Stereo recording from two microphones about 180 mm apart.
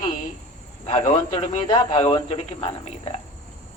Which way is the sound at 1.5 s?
30° left (ahead or behind).